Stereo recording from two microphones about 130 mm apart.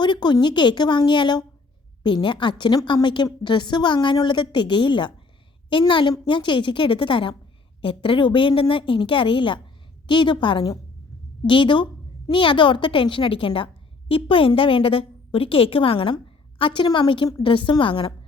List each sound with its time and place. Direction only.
0.0 s a woman's voice: 35° left (ahead or behind)